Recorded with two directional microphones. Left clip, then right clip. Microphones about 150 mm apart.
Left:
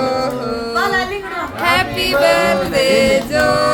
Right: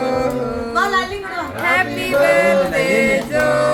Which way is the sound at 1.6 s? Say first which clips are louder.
Left 2 dB; 30° left (ahead or behind).